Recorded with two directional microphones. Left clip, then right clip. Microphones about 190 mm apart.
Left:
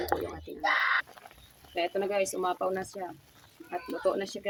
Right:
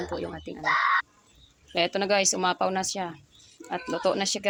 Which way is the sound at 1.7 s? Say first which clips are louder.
Right 5 dB; 35° right (ahead or behind).